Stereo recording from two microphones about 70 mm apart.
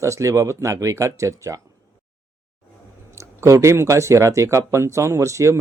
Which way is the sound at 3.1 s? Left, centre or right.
Right.